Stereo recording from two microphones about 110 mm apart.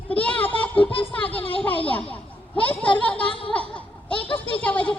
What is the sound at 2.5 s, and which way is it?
Speech, 15° left (ahead or behind).